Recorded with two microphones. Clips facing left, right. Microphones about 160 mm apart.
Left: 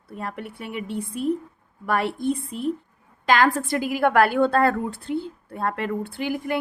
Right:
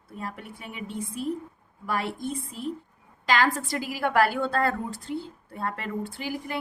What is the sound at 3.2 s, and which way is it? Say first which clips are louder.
A woman's voice: left 5 dB; 50° left (ahead or behind).